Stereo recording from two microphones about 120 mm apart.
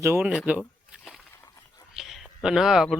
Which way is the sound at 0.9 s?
Centre (ahead or behind).